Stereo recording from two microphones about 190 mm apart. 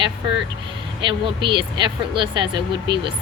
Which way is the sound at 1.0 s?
25° right (ahead or behind).